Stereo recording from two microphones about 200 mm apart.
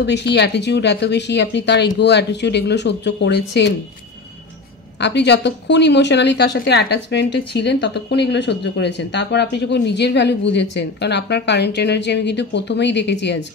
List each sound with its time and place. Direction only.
0.0 s a woman's voice: 60° left (ahead or behind)
5.0 s a woman's voice: 60° left (ahead or behind)